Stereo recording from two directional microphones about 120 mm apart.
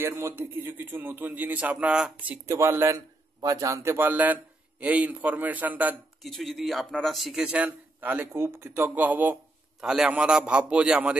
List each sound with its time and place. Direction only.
0.0 s a man's voice: 20° right (ahead or behind)
2.4 s a man's voice: 20° right (ahead or behind)
6.2 s a man's voice: centre (ahead or behind); by 9.4 s 15° right (ahead or behind)
9.8 s a man's voice: 5° right (ahead or behind)